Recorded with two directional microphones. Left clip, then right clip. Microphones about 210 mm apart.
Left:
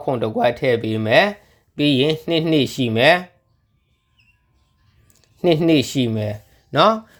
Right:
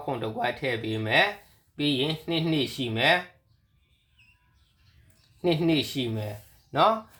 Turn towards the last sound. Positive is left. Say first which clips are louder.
# left 7 dB
turn(degrees=45)  # may be behind; listen again after turning